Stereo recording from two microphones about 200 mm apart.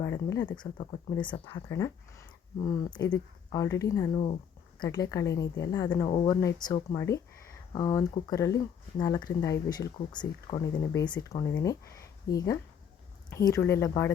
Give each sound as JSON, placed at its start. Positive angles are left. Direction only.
{"t": 0.0, "sound": "a woman's voice", "side_deg": 15}